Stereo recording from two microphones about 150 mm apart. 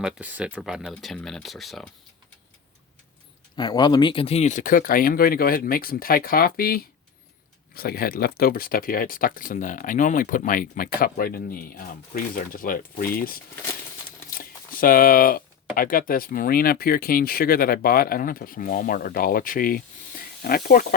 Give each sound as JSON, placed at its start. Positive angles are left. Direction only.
{"t": 0.0, "sound": "speech", "side_deg": -10}
{"t": 3.5, "sound": "speech", "side_deg": 30}
{"t": 7.8, "sound": "speech", "side_deg": 90}